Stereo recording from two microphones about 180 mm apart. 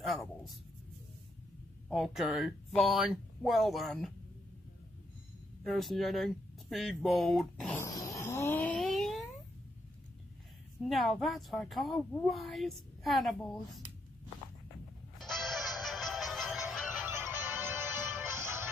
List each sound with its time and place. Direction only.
1.9 s a woman's voice: centre (ahead or behind)
5.6 s a woman's voice: centre (ahead or behind)
7.7 s dog: 20° left (ahead or behind)
8.2 s a sound: 15° left (ahead or behind)
10.8 s a woman's voice: centre (ahead or behind)
15.1 s music: centre (ahead or behind)
17.1 s music: 15° right (ahead or behind)